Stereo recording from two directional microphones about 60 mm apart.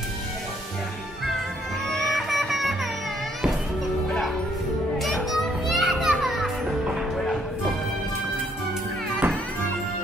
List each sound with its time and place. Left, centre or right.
1.9 s music: centre
4.9 s children playing: centre
9.2 s music: right